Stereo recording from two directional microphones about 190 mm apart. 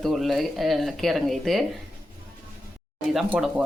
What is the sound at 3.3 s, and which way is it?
Speech, 5° right (ahead or behind).